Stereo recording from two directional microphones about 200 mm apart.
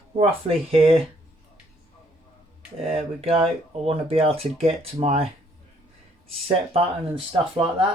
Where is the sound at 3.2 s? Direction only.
30° right (ahead or behind).